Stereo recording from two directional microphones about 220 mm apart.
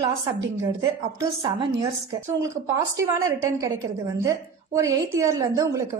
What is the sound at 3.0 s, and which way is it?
A woman's voice, 15° right (ahead or behind).